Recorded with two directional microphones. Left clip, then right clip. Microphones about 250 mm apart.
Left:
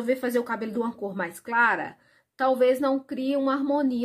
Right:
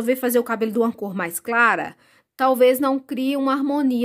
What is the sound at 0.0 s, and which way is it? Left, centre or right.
Speech, right.